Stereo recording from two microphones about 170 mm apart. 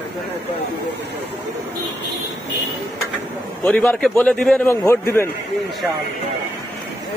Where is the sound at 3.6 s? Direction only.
10° left (ahead or behind).